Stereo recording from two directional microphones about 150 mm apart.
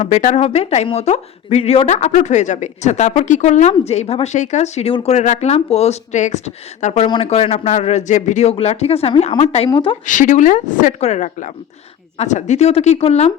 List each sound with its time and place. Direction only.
0.0 s speech: 55° left (ahead or behind)
9.6 s speech: 35° left (ahead or behind)
10.1 s a woman's voice: 60° left (ahead or behind); by 13.3 s 45° left (ahead or behind)